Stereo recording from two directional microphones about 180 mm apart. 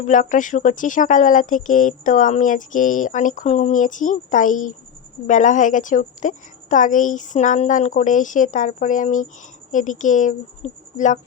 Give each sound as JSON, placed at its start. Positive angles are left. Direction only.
{"t": 0.0, "sound": "speech", "side_deg": 45}